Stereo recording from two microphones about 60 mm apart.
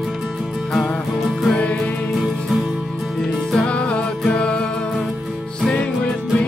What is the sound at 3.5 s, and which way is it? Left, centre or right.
Music, centre.